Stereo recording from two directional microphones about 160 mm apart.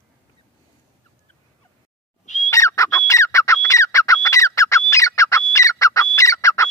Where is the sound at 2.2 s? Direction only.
50° left (ahead or behind).